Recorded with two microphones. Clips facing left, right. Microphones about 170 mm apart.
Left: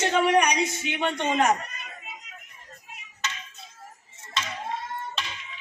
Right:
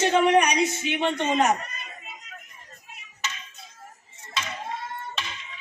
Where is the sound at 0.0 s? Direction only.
20° right (ahead or behind).